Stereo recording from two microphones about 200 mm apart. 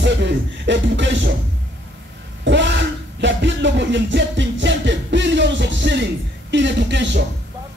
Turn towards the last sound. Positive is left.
turn(degrees=-60)  # may be behind; listen again after turning